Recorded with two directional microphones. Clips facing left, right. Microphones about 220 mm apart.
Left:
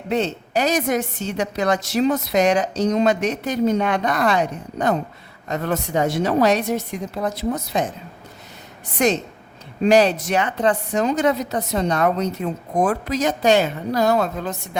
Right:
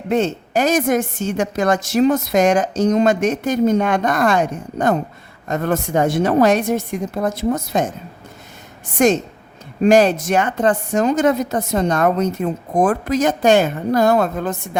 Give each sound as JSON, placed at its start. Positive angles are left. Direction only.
{"t": 0.1, "sound": "a woman's voice", "side_deg": -50}
{"t": 9.0, "sound": "a woman's voice", "side_deg": -50}